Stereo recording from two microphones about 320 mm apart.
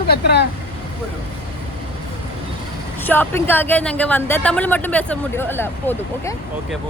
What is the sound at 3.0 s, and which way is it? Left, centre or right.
Speech, centre.